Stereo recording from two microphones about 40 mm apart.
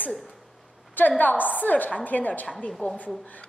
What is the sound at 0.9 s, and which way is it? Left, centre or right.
A woman's voice, left.